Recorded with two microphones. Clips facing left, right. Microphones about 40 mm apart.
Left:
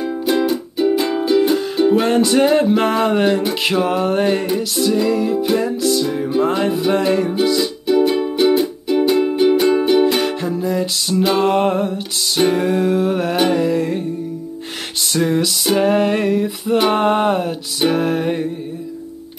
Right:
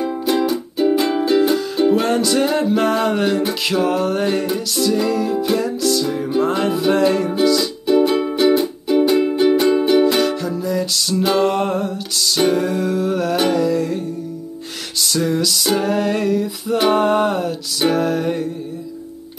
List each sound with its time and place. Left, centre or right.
0.2 s music: centre
1.1 s music: centre
1.8 s music: centre
10.0 s music: left